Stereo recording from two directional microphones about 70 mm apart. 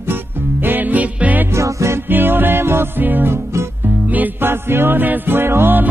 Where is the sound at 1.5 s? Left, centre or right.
Right.